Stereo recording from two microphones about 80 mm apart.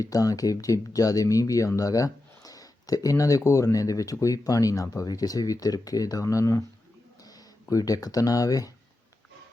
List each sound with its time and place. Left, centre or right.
0.0 s speech: left
7.3 s speech: left